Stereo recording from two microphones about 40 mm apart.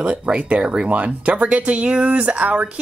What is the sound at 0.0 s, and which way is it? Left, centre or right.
Speech, right.